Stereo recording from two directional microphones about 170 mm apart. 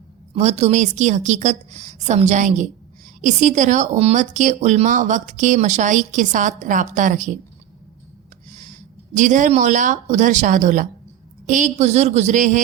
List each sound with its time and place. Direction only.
0.3 s speech: 40° right (ahead or behind)
8.5 s speech: 45° right (ahead or behind)